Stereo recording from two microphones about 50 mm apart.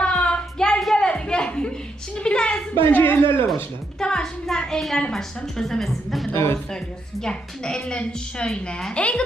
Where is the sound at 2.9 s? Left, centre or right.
Left.